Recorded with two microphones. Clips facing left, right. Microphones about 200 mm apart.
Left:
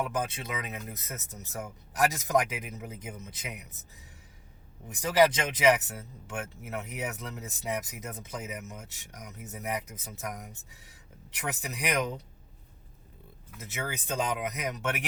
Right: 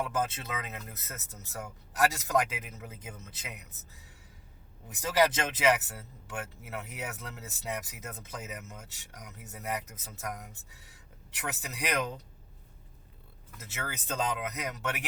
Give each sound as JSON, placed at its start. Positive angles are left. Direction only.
{"t": 0.0, "sound": "speech", "side_deg": 15}
{"t": 5.0, "sound": "speech", "side_deg": 15}
{"t": 13.6, "sound": "speech", "side_deg": 15}